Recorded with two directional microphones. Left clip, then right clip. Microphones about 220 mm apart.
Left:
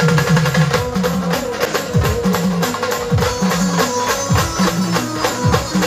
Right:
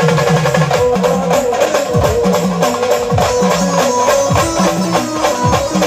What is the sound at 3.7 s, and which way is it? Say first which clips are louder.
Music: right 6 dB; 25° right (ahead or behind).